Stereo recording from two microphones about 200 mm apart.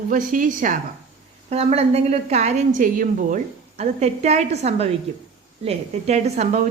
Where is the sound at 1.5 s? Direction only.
30° right (ahead or behind).